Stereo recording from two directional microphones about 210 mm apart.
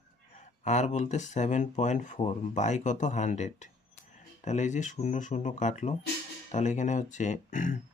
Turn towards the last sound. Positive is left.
turn(degrees=40)  # may be behind; listen again after turning